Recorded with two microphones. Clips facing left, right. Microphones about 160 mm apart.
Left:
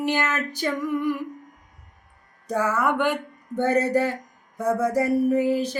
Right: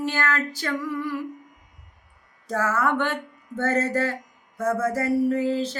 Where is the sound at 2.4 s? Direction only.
15° left (ahead or behind).